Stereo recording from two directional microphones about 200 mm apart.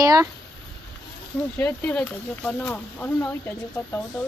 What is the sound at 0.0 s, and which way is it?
Speech, 15° right (ahead or behind).